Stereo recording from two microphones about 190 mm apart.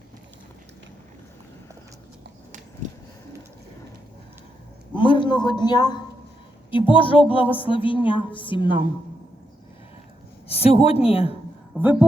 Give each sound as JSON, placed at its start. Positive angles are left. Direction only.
{"t": 2.8, "sound": "a sound", "side_deg": -40}
{"t": 4.9, "sound": "a man's voice", "side_deg": 25}
{"t": 10.5, "sound": "speech", "side_deg": 30}
{"t": 11.8, "sound": "a woman's voice", "side_deg": -10}